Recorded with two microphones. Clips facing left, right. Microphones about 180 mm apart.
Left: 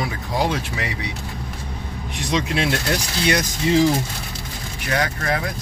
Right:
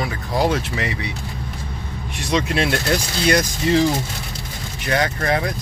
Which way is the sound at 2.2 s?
15° left (ahead or behind).